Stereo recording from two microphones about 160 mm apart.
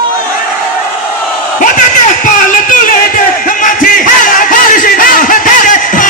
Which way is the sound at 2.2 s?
55° left (ahead or behind).